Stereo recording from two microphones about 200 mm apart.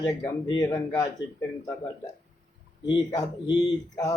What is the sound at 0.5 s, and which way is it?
Speech, 15° left (ahead or behind).